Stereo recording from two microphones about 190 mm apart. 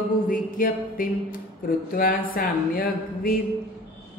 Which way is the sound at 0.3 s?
45° left (ahead or behind).